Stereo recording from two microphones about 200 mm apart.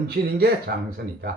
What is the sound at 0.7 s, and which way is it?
Speech, 50° right (ahead or behind).